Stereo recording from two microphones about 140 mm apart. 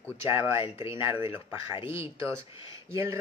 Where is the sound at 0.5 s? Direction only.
40° left (ahead or behind).